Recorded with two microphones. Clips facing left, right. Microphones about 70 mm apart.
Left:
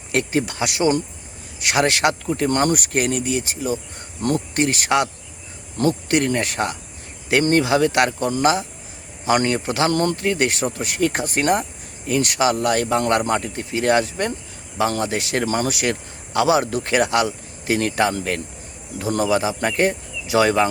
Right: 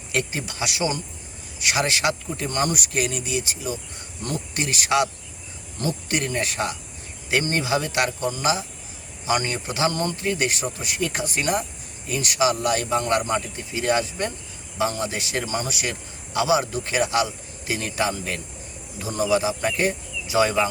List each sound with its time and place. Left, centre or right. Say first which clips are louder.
0.1 s speech: left 6 dB; left
5.7 s a man's voice: left 7 dB; left